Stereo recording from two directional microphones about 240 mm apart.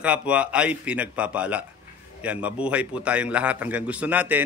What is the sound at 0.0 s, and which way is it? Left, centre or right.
A man's voice, centre.